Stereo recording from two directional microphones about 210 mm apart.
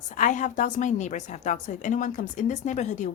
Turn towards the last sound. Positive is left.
turn(degrees=35)  # may be behind; listen again after turning